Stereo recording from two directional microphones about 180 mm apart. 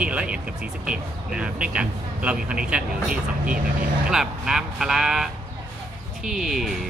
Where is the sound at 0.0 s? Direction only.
5° right (ahead or behind).